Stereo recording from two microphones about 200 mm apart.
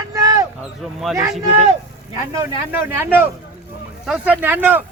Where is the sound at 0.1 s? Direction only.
15° right (ahead or behind).